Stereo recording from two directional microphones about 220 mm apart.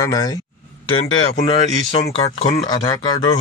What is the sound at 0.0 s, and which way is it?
Speech, 15° left (ahead or behind).